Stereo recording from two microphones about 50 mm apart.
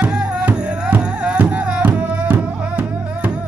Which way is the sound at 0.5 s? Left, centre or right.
Centre.